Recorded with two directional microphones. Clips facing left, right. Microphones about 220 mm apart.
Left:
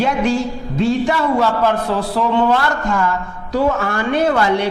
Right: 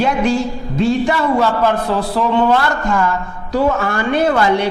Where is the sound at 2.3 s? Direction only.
20° right (ahead or behind).